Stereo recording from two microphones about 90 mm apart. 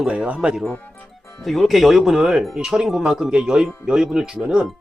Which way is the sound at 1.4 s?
Centre (ahead or behind).